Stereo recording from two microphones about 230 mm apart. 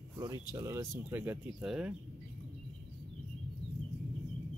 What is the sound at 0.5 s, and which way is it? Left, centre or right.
Speech, centre.